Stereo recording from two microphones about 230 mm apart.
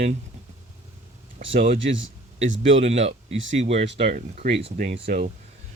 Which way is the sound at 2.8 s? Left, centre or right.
Right.